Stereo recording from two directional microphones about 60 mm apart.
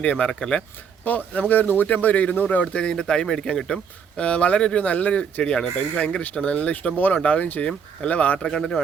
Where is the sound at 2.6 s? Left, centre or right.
Centre.